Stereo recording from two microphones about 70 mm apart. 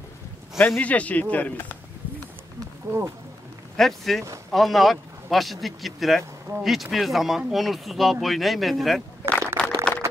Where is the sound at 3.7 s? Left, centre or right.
Centre.